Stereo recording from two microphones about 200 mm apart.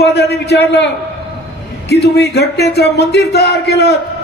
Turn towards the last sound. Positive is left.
turn(degrees=55)  # may be behind; listen again after turning